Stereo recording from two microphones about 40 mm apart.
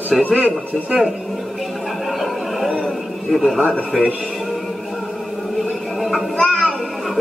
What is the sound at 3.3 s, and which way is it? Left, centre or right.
Speech, centre.